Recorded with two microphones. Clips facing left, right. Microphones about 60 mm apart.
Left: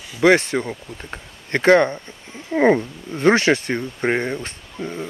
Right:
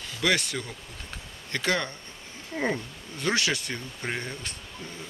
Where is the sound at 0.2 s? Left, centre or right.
Left.